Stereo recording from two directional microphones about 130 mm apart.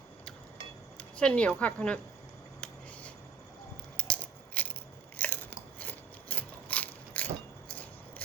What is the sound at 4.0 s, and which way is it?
Crushing, 10° left (ahead or behind).